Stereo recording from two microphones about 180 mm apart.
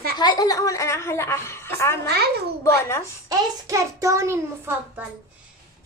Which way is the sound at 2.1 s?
60° right (ahead or behind).